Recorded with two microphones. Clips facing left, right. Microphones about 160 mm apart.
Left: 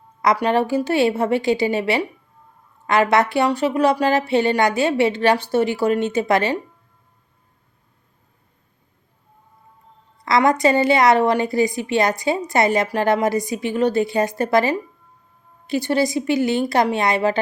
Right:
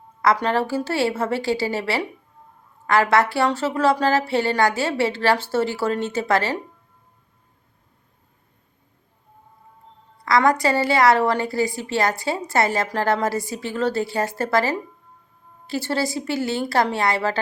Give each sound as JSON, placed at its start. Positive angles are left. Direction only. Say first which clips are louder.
{"t": 0.2, "sound": "a woman's voice", "louder": "left 2 dB", "side_deg": 15}
{"t": 10.2, "sound": "a woman's voice", "louder": "left 2 dB", "side_deg": 20}